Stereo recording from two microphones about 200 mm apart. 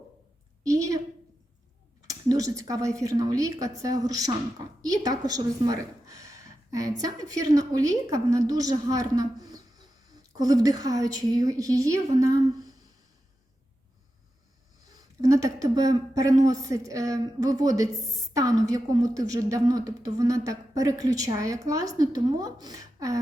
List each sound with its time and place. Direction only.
0.6 s a sound: 15° right (ahead or behind)
2.0 s a woman's voice: 15° right (ahead or behind)
15.2 s a woman's voice: 15° right (ahead or behind)